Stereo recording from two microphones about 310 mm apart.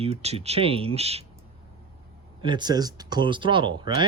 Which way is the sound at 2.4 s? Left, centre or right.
Centre.